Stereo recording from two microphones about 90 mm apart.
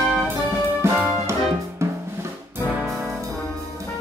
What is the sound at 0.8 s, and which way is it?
Music, 30° right (ahead or behind).